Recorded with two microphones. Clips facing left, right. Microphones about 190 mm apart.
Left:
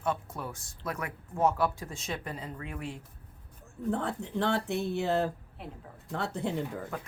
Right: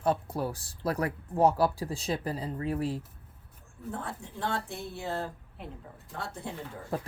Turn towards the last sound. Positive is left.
turn(degrees=-35)  # may be behind; listen again after turning